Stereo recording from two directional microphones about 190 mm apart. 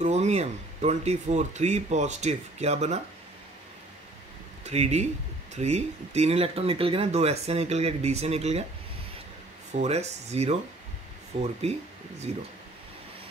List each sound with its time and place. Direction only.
0.0 s speech: 35° right (ahead or behind)
4.6 s speech: 35° right (ahead or behind)
9.7 s speech: 35° right (ahead or behind)